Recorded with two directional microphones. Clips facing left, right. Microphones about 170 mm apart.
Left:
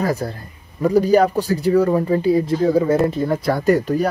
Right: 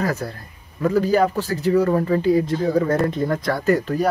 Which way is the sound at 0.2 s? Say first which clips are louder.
Left 3 dB; 20° left (ahead or behind).